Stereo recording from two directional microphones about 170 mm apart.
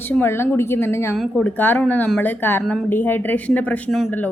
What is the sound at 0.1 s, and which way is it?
A woman's voice, 10° left (ahead or behind).